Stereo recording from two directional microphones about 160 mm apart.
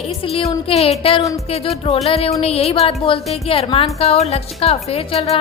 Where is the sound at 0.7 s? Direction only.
40° left (ahead or behind).